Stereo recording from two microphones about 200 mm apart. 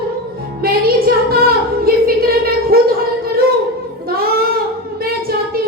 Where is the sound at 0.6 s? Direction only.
50° right (ahead or behind).